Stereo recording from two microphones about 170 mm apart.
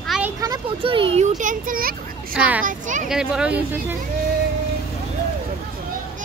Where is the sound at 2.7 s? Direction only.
50° right (ahead or behind).